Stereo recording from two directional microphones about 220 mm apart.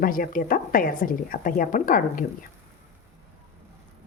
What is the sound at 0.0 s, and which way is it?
A woman's voice, 40° left (ahead or behind).